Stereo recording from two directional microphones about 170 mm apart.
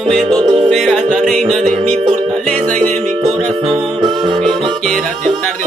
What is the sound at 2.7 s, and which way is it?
Music, 40° right (ahead or behind).